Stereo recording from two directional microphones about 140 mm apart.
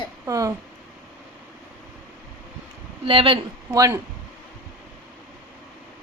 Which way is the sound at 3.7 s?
25° right (ahead or behind).